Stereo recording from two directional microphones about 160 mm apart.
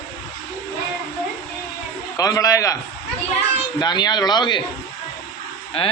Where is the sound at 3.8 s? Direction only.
25° left (ahead or behind).